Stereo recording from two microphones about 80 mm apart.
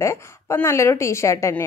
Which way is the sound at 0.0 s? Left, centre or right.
Left.